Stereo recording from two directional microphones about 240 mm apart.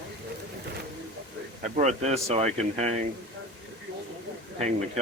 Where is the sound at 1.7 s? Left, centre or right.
Right.